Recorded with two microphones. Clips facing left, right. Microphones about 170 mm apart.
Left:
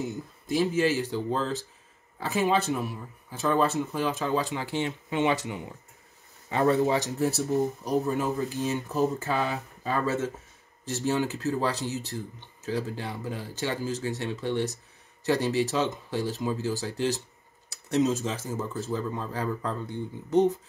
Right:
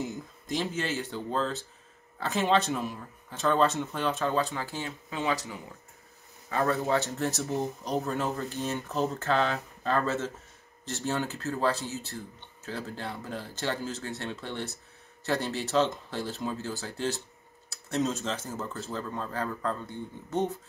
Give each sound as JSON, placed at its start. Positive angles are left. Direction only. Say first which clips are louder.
{"t": 0.0, "sound": "speech", "louder": "left 2 dB", "side_deg": 5}
{"t": 6.5, "sound": "speech", "louder": "left 4 dB", "side_deg": 20}